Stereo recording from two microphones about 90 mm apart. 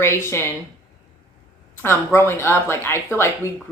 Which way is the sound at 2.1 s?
25° left (ahead or behind).